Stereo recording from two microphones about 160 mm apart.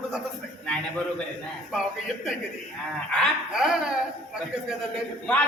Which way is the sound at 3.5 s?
5° right (ahead or behind).